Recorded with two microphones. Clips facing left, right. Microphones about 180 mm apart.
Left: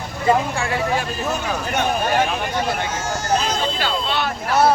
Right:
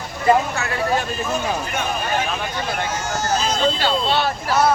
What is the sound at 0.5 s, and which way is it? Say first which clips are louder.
Speech: left 2 dB; 30° left (ahead or behind).